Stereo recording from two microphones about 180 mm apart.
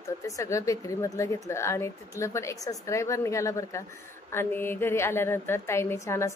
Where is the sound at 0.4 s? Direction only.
15° left (ahead or behind).